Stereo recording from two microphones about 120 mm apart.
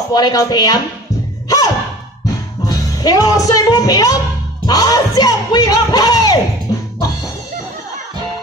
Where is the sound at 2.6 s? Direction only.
30° left (ahead or behind).